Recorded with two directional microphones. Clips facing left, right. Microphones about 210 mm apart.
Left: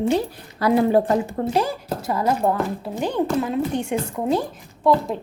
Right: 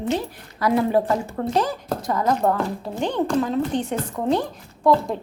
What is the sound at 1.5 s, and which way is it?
A woman's voice, 10° left (ahead or behind).